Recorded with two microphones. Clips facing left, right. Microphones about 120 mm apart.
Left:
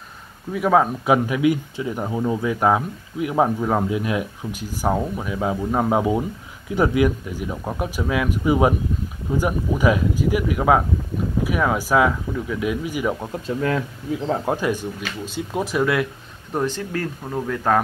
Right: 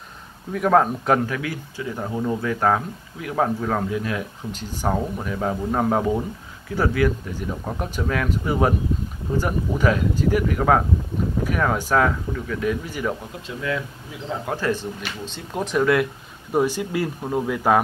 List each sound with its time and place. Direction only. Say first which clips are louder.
0.5 s speech: even; 5° left (ahead or behind)
13.6 s speech: left 3 dB; 40° left (ahead or behind)
14.6 s speech: left 1 dB; 15° left (ahead or behind)
16.5 s speech: right 3 dB; 10° right (ahead or behind)